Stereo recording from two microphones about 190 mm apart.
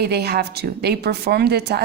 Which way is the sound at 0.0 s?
60° right (ahead or behind).